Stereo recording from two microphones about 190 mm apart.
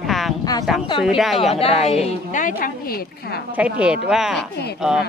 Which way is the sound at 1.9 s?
35° left (ahead or behind).